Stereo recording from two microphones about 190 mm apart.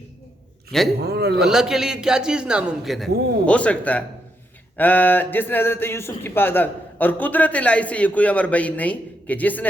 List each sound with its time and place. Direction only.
0.9 s a man's voice: 55° right (ahead or behind)
1.4 s a man's voice: 5° right (ahead or behind)